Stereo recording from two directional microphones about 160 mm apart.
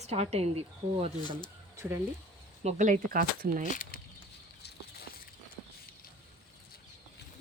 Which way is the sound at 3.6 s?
55° left (ahead or behind).